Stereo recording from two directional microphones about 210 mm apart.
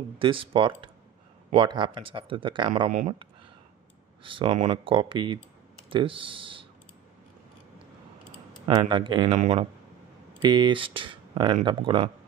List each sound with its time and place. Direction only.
0.2 s speech: 25° right (ahead or behind)
4.2 s speech: 25° right (ahead or behind)
8.6 s speech: 25° right (ahead or behind)
10.4 s speech: 20° right (ahead or behind)